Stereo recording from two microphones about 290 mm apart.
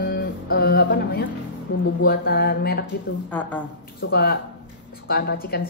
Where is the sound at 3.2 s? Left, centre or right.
Centre.